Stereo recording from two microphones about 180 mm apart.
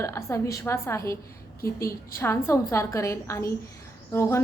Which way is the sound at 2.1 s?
15° left (ahead or behind).